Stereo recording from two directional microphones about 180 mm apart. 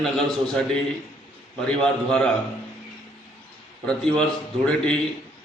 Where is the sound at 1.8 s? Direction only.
5° left (ahead or behind).